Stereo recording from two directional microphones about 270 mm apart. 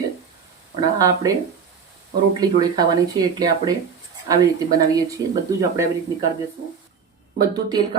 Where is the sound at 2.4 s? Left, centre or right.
Centre.